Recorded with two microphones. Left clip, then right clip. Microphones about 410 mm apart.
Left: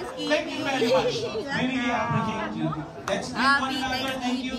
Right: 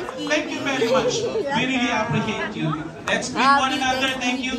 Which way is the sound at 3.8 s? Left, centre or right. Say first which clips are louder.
Right 7 dB; centre.